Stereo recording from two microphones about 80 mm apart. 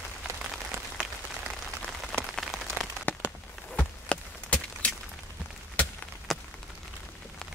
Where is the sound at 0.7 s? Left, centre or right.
Right.